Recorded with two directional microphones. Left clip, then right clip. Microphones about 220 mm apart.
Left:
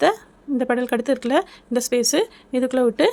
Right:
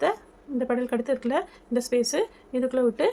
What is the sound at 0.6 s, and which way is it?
Speech, 50° left (ahead or behind).